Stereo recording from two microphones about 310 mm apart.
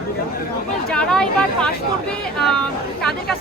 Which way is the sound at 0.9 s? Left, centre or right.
Centre.